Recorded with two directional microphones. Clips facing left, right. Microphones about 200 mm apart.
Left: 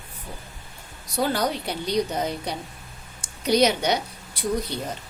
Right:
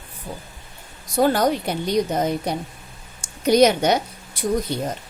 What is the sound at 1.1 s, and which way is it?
Speech, 50° right (ahead or behind).